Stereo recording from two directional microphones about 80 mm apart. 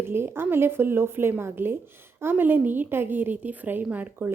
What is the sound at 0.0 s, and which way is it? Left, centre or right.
A woman's voice, right.